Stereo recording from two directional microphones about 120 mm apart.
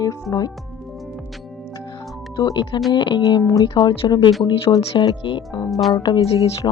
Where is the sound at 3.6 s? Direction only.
40° left (ahead or behind).